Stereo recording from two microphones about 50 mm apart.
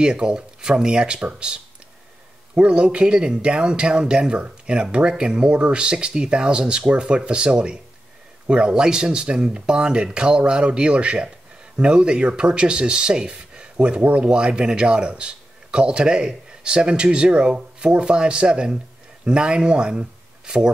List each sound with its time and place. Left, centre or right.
0.0 s speech: centre